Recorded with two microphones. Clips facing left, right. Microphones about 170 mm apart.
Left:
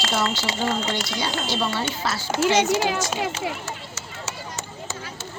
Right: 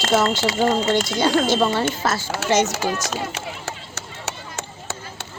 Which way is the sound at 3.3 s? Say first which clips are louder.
Left 2 dB; 65° right (ahead or behind).